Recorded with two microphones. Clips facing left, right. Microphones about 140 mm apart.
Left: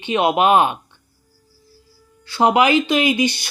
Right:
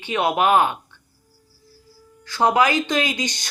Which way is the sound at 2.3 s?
15° left (ahead or behind).